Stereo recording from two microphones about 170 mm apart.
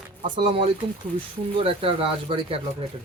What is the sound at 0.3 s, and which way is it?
Speech, 35° right (ahead or behind).